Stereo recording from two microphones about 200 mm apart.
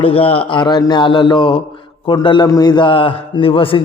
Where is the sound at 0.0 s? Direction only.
25° left (ahead or behind).